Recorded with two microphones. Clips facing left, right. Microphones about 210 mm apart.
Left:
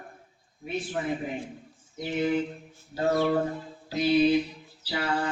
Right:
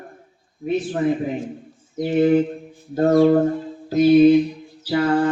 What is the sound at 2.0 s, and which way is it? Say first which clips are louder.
Music: right 10 dB; 50° right (ahead or behind).